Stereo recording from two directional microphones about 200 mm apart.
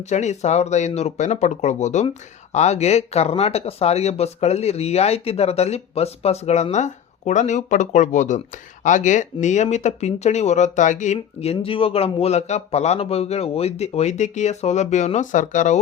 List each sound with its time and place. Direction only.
0.1 s speech: 35° left (ahead or behind)